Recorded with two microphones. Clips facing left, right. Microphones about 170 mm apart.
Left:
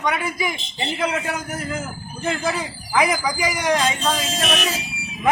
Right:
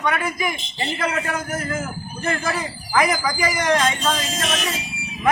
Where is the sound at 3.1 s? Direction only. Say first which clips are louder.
Even; 15° left (ahead or behind).